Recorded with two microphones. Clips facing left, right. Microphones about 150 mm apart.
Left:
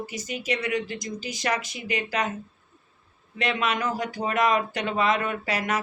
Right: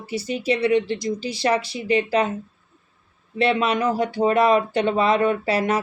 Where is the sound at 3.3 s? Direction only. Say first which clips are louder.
Right 6 dB; 30° right (ahead or behind).